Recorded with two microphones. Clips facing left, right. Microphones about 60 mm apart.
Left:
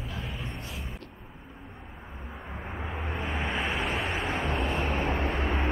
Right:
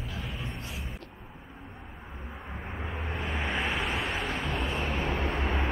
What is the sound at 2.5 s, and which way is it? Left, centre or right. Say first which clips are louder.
Vehicle: left 1 dB; centre.